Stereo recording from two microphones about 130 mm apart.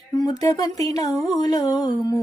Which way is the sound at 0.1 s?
35° left (ahead or behind).